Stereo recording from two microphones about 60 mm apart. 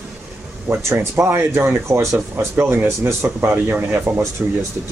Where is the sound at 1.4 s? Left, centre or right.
Right.